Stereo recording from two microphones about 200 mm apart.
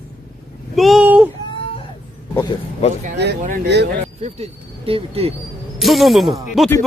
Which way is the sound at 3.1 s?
60° right (ahead or behind).